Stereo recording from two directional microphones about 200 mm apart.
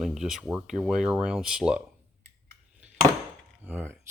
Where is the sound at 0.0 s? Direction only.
Centre (ahead or behind).